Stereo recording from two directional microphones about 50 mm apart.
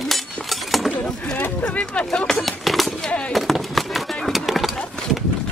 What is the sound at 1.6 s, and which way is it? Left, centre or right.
Speech, left.